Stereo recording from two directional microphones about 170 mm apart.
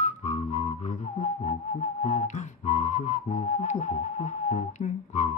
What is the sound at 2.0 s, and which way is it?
Whistling, 45° left (ahead or behind).